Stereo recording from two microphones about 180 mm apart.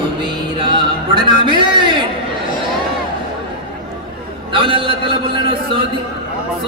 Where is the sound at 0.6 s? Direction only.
25° right (ahead or behind).